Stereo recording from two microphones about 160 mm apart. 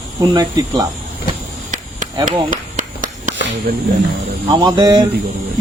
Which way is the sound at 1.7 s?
55° right (ahead or behind).